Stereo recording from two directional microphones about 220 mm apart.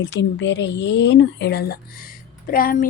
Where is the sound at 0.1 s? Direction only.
55° left (ahead or behind).